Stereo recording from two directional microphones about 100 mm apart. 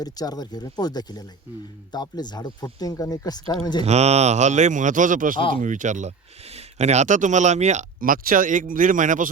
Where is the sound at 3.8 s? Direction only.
90° right.